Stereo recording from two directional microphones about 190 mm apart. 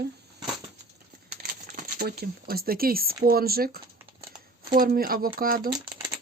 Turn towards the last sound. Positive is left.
turn(degrees=-50)  # may be behind; listen again after turning